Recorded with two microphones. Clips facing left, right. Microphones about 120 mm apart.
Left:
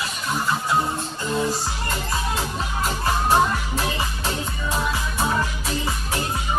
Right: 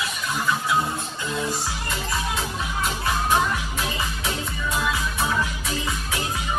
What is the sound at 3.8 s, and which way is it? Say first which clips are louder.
Music: left 2 dB; 35° left (ahead or behind).